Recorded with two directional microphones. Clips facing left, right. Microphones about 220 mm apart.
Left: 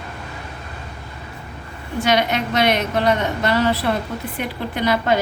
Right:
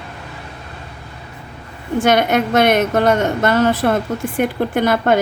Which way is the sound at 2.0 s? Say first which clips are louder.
Right 4 dB; 50° right (ahead or behind).